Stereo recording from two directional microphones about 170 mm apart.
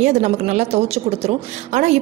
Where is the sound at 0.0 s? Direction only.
45° right (ahead or behind).